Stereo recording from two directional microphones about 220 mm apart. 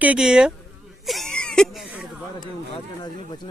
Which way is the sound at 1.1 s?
Centre (ahead or behind).